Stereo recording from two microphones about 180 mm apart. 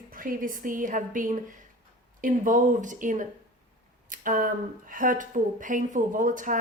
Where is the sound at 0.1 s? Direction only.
50° right (ahead or behind).